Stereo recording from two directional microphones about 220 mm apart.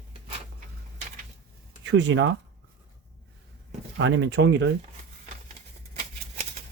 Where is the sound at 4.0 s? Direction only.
55° right (ahead or behind).